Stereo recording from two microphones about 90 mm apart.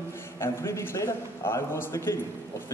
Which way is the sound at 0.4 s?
30° left (ahead or behind).